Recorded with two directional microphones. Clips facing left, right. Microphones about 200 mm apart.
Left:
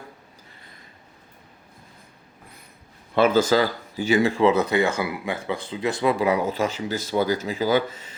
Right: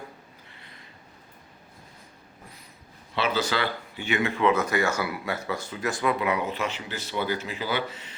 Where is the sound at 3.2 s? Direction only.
50° left (ahead or behind); by 4.8 s 30° left (ahead or behind).